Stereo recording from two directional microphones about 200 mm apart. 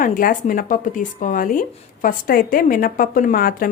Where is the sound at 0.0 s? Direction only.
45° left (ahead or behind).